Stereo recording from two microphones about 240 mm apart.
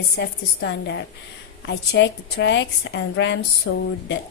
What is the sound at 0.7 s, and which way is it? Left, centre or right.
A woman's voice, left.